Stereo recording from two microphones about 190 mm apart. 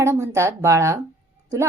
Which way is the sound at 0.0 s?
15° right (ahead or behind).